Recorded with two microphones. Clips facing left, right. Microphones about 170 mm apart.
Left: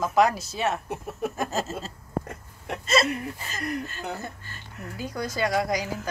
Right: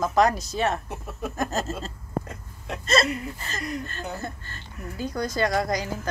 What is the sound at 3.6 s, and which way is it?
Speech, 60° left (ahead or behind).